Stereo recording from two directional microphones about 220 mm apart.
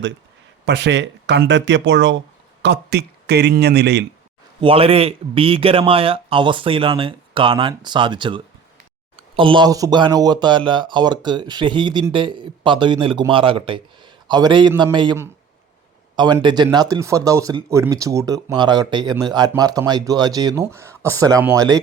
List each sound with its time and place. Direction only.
0.6 s speech: 50° right (ahead or behind)
4.6 s speech: 25° right (ahead or behind)